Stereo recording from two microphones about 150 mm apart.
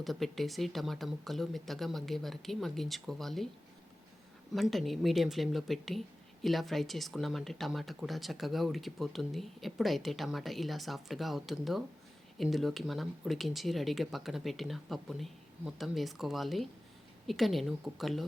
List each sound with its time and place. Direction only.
0.0 s speech: centre (ahead or behind)
4.5 s speech: centre (ahead or behind)